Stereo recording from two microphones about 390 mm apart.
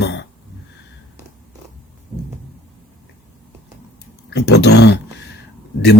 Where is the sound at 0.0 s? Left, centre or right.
Left.